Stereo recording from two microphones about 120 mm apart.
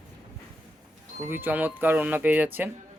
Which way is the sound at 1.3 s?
15° right (ahead or behind).